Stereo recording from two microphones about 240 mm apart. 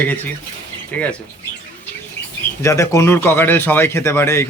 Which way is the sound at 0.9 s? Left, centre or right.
Centre.